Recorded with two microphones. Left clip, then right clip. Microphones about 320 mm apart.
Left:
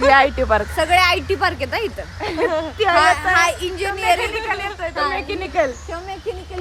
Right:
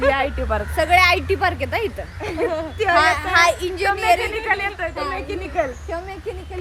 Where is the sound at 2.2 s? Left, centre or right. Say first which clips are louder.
Left 3 dB; left.